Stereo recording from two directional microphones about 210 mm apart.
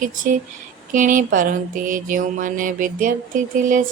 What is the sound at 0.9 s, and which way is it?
A woman's voice, 40° right (ahead or behind).